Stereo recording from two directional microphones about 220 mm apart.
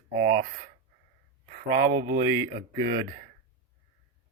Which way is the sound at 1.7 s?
50° right (ahead or behind).